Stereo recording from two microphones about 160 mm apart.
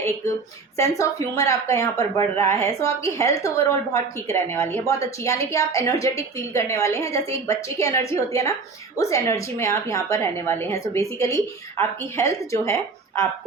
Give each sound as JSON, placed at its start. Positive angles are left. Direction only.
{"t": 0.8, "sound": "a woman's voice", "side_deg": 20}